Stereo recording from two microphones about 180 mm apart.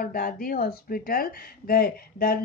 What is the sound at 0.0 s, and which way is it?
Speech, 55° left (ahead or behind).